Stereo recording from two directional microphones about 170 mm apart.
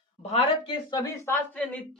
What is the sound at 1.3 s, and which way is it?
Speech, 10° left (ahead or behind).